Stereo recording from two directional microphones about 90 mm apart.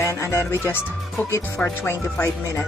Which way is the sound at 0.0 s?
30° left (ahead or behind).